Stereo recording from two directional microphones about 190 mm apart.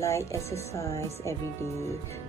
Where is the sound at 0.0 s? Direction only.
15° left (ahead or behind).